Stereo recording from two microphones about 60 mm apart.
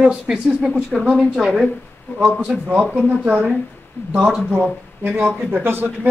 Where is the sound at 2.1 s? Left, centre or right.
Centre.